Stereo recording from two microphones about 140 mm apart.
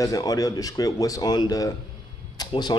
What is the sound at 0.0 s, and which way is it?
Speech, 25° left (ahead or behind).